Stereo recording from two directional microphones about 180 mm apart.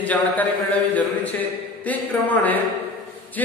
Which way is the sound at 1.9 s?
10° left (ahead or behind).